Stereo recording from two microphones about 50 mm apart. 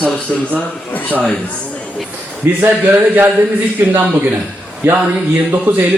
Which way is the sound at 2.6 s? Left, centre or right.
Right.